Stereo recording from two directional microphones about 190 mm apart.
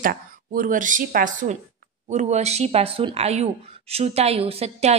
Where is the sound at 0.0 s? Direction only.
45° right (ahead or behind).